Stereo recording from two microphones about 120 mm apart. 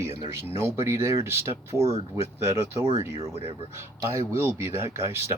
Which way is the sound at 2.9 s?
60° left (ahead or behind).